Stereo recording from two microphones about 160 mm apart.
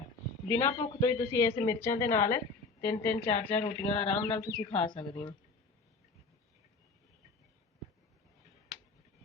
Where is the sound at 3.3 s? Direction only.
40° left (ahead or behind).